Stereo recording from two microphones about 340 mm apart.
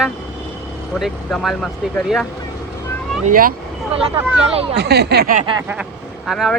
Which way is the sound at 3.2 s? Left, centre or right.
Right.